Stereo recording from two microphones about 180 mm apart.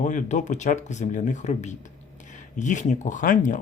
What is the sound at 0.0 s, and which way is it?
Speech, 45° left (ahead or behind).